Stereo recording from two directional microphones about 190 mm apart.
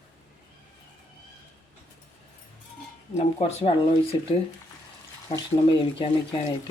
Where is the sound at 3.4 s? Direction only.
35° left (ahead or behind).